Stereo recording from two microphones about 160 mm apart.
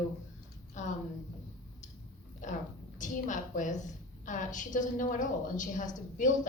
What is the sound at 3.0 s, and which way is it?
A woman's voice, 50° left (ahead or behind).